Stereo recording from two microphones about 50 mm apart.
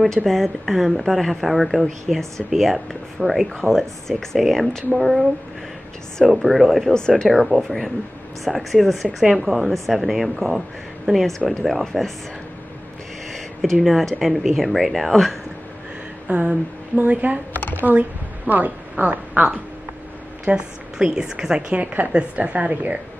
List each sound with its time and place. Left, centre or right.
0.2 s a woman's voice: centre
6.2 s a woman's voice: centre
6.9 s speech: centre
7.2 s a woman's voice: centre
13.3 s a sound: centre
13.7 s a woman's voice: centre
16.3 s a sound: right
16.9 s a woman's voice: right
17.5 s computer keyboard: left
18.5 s a woman's voice: right